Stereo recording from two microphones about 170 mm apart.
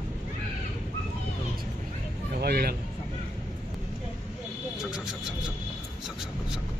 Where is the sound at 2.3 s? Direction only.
65° right (ahead or behind).